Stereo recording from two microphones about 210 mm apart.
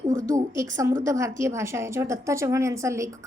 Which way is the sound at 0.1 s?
40° right (ahead or behind).